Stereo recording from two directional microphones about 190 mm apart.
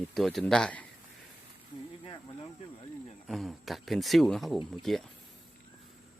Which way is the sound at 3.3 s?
Centre (ahead or behind).